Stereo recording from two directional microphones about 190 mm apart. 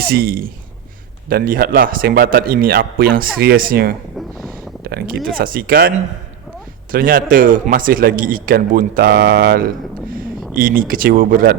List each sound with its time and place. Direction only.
0.1 s a man's voice: 50° right (ahead or behind)
6.9 s a man's voice: 50° right (ahead or behind)